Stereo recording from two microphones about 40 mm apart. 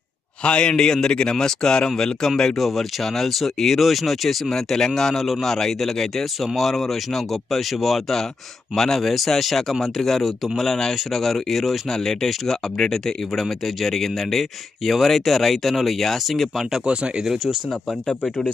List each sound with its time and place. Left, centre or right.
0.4 s a man's voice: left; by 16.8 s centre
16.8 s speech: right
17.2 s speech: centre
17.8 s a man's voice: centre